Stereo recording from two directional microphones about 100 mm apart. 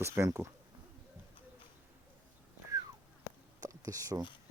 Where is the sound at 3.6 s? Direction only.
35° right (ahead or behind).